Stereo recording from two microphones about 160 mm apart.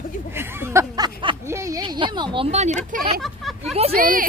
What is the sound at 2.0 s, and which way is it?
A woman's voice, 30° right (ahead or behind).